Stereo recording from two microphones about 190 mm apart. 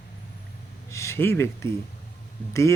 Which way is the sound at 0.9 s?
15° left (ahead or behind).